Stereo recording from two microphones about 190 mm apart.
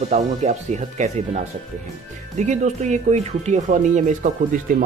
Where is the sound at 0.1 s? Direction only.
40° right (ahead or behind).